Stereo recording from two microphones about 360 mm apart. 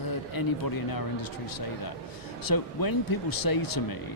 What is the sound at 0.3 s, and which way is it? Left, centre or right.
Speech, left.